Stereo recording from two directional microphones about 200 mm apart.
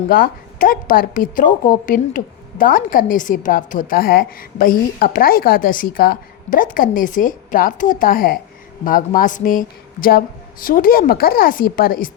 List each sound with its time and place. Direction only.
0.1 s a woman's voice: 45° left (ahead or behind)